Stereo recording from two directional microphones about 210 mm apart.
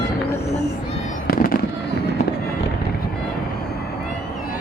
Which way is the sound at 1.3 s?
45° left (ahead or behind).